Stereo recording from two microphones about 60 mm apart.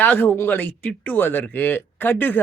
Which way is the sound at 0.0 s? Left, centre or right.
Left.